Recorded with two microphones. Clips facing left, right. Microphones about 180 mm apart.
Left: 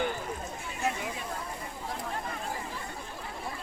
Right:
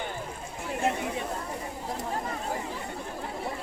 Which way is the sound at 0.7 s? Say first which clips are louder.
Right 5 dB; 60° right (ahead or behind).